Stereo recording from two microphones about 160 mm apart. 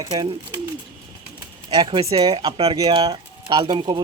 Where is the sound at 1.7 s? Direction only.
30° right (ahead or behind).